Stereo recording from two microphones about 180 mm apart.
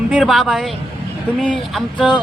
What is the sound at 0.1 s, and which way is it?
Speech, 5° right (ahead or behind).